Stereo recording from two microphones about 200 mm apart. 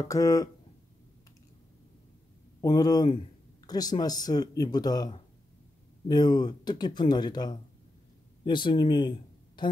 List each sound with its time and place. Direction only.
0.1 s speech: 15° left (ahead or behind)
2.6 s a woman's voice: 20° left (ahead or behind)